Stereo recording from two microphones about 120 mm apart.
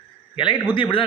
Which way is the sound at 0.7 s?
45° left (ahead or behind).